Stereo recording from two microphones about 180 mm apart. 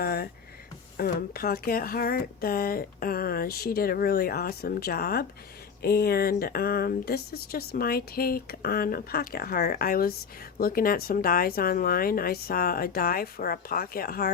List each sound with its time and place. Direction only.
0.0 s speech: 55° left (ahead or behind)